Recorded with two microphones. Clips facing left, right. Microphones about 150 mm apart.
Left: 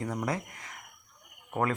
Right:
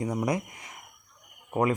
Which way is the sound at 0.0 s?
15° right (ahead or behind).